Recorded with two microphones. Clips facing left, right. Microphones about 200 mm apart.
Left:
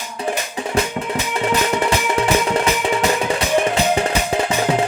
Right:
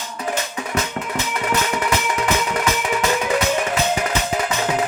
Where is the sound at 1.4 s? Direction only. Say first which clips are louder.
Left 4 dB; 30° left (ahead or behind).